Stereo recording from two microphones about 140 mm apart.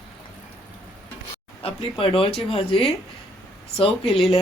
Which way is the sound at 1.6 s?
40° left (ahead or behind).